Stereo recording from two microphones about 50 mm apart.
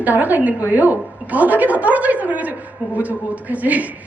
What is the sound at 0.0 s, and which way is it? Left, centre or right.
Speech, right.